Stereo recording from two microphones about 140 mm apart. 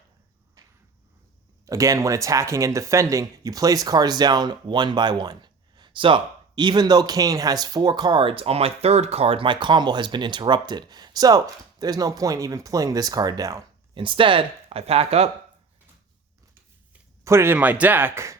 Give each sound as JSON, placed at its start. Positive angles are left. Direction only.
{"t": 1.6, "sound": "speech", "side_deg": -25}
{"t": 13.9, "sound": "speech", "side_deg": -35}
{"t": 17.2, "sound": "speech", "side_deg": -20}